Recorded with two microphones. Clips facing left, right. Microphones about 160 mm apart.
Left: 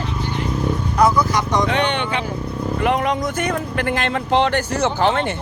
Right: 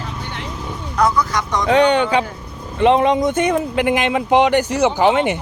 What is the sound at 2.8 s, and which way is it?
Speech, 20° right (ahead or behind).